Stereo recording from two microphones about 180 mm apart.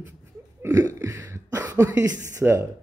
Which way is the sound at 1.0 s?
15° right (ahead or behind).